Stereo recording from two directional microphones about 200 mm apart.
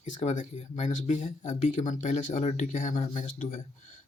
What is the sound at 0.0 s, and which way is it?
Speech, 35° left (ahead or behind).